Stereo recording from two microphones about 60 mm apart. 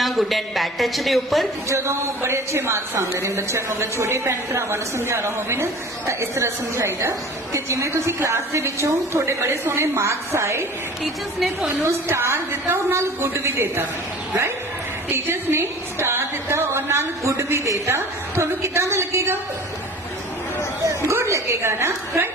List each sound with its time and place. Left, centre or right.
0.0 s a man's voice: centre
1.7 s a woman's voice: right
11.0 s a man's voice: centre
12.0 s a woman's voice: right
15.1 s a woman's voice: right
20.8 s a woman's voice: right